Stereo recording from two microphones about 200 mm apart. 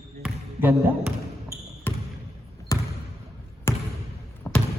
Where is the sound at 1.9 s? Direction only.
10° left (ahead or behind).